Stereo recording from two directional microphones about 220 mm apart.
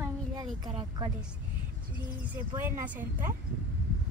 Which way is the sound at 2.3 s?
10° right (ahead or behind).